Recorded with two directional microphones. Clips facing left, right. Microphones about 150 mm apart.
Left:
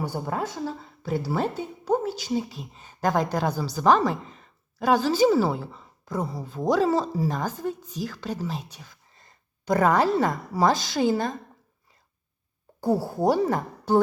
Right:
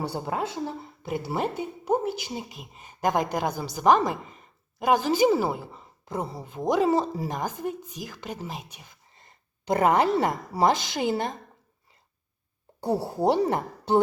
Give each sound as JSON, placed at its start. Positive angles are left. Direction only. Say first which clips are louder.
{"t": 0.2, "sound": "a woman's voice", "louder": "even", "side_deg": -20}
{"t": 12.9, "sound": "a woman's voice", "louder": "left 1 dB", "side_deg": -25}